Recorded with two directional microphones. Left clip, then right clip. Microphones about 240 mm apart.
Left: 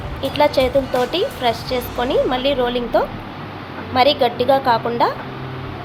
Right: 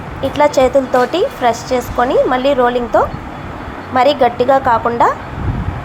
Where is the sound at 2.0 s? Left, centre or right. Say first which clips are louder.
Right 5 dB; centre.